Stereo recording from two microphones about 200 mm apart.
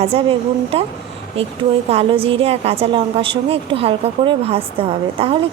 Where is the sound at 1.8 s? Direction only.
30° right (ahead or behind).